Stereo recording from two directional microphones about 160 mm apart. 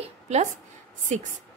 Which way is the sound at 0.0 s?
45° right (ahead or behind).